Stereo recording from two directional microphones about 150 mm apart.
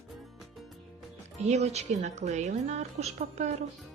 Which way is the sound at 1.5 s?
50° right (ahead or behind).